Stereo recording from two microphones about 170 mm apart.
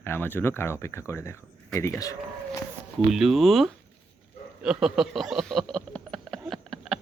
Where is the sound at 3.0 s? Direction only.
Centre (ahead or behind).